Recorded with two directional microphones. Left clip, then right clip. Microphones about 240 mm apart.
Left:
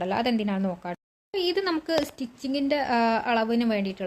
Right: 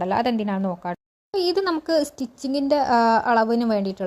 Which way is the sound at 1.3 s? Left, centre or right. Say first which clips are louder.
Right 4 dB; centre.